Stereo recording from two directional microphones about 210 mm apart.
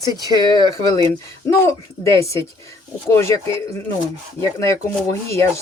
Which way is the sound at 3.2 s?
15° left (ahead or behind).